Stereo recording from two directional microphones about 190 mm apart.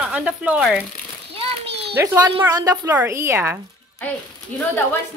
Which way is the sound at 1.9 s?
10° right (ahead or behind).